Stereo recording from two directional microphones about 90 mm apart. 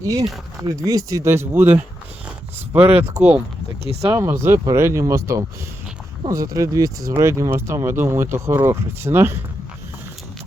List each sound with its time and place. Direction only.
0.0 s speech: 40° right (ahead or behind); by 3.4 s 15° right (ahead or behind)
4.0 s speech: 30° right (ahead or behind)